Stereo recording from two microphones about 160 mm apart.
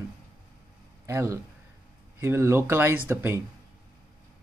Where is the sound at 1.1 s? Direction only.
15° right (ahead or behind).